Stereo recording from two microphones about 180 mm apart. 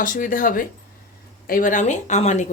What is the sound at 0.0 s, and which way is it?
A woman's voice, 50° left (ahead or behind).